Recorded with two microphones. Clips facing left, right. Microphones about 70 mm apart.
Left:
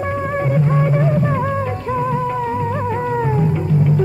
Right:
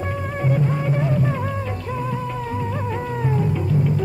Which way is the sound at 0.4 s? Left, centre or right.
Left.